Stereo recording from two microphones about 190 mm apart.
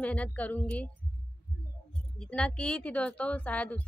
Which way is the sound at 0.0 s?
10° left (ahead or behind).